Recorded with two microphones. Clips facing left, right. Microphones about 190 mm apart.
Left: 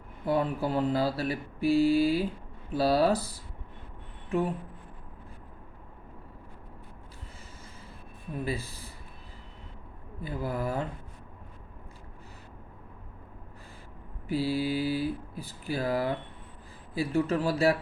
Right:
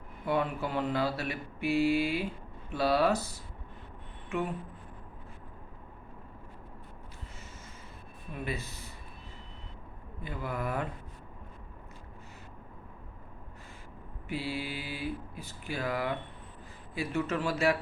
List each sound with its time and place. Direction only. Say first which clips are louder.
0.3 s mantra: left 3 dB; 35° left (ahead or behind)
4.3 s mantra: left 5 dB; 35° left (ahead or behind)
8.4 s mantra: left 2 dB; 30° left (ahead or behind)
10.2 s mantra: left 3 dB; 35° left (ahead or behind)
14.3 s mantra: left 7 dB; 35° left (ahead or behind)